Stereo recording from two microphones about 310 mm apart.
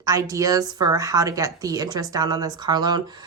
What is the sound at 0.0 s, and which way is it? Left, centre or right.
Speech, centre.